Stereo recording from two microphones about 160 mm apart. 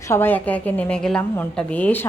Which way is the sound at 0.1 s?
15° left (ahead or behind).